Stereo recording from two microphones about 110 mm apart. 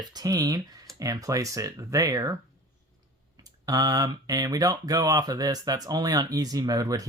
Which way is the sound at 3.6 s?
35° right (ahead or behind).